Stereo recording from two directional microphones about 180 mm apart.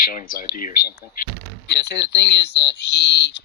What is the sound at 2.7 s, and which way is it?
Speech, 70° left (ahead or behind).